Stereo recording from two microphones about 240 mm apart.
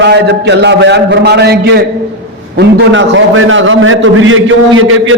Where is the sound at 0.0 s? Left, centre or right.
Right.